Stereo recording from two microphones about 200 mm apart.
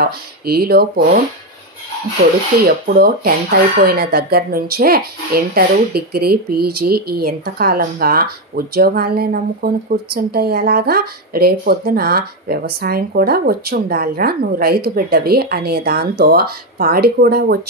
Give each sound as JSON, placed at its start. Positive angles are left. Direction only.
{"t": 0.0, "sound": "a woman's voice", "side_deg": -50}
{"t": 2.6, "sound": "a woman's voice", "side_deg": -50}